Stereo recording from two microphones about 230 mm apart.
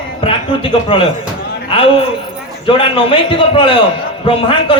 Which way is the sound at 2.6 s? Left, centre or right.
Left.